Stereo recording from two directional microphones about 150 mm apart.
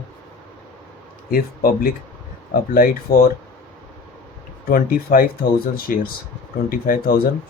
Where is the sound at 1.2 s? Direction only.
75° left (ahead or behind).